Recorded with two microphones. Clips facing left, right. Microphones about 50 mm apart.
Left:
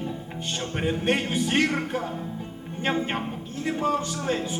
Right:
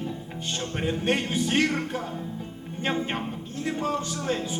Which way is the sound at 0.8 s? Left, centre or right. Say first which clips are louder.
Left 1 dB; centre.